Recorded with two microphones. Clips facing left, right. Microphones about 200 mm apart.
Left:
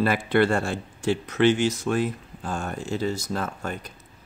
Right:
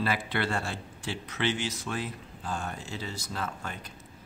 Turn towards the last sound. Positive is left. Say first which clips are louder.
# left 7 dB
turn(degrees=45)  # may be behind; listen again after turning